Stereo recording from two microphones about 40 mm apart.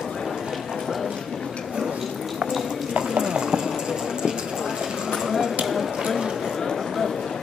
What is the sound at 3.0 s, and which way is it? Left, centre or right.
Clip-clop, centre.